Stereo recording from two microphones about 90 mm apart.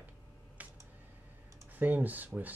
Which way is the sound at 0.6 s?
15° right (ahead or behind).